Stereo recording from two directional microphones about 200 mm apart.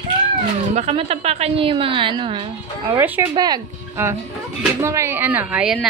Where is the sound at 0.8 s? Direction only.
30° right (ahead or behind).